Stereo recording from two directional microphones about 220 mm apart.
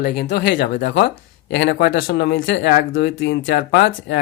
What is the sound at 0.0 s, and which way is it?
Speech, 45° left (ahead or behind).